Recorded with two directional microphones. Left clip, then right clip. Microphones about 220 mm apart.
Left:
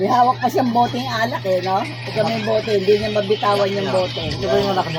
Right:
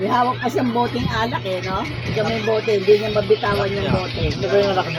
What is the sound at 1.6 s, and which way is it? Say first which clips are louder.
Speech: left 4 dB; 10° left (ahead or behind).